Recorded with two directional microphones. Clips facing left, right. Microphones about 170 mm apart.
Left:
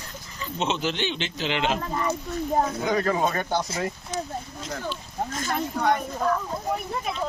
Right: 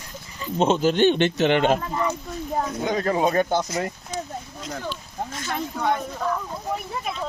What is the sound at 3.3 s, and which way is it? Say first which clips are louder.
Speech: right 5 dB; 40° right (ahead or behind).